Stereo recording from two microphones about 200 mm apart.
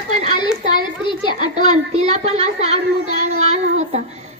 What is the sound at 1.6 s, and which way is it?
A woman's voice, 30° right (ahead or behind).